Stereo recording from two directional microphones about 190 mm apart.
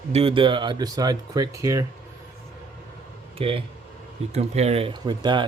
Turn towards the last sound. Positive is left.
turn(degrees=-25)  # may be behind; listen again after turning